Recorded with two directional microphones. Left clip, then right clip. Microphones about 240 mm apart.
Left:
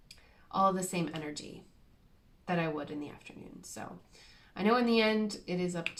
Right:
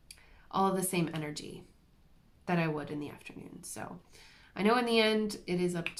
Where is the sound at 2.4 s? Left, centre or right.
Right.